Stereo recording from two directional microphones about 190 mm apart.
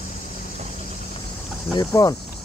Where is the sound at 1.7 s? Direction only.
20° left (ahead or behind).